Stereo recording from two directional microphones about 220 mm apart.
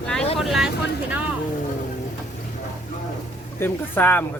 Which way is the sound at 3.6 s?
10° left (ahead or behind).